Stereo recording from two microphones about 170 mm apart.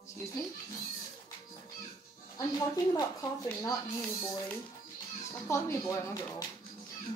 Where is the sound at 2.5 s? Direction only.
20° left (ahead or behind).